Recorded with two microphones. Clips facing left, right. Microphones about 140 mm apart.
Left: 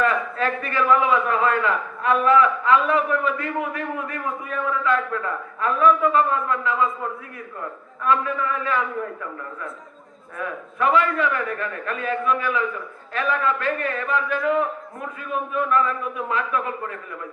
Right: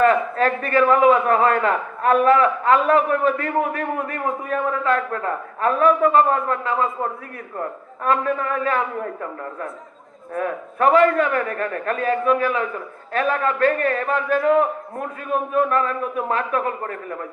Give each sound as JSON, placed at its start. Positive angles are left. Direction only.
{"t": 0.0, "sound": "a man's voice", "side_deg": -40}
{"t": 10.3, "sound": "a man's voice", "side_deg": -40}